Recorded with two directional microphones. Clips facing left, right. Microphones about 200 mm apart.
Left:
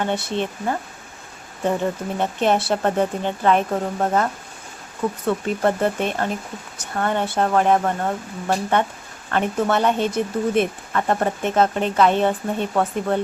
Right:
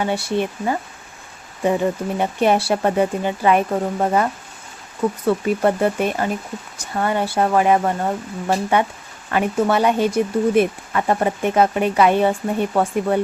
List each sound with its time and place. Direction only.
0.0 s speech: 10° right (ahead or behind)